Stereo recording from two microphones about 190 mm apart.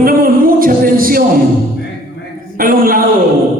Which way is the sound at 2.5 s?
50° right (ahead or behind).